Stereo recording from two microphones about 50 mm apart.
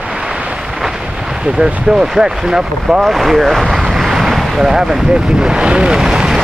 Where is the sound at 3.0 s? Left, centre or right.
Centre.